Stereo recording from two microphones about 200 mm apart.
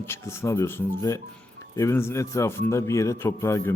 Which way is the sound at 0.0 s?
10° left (ahead or behind).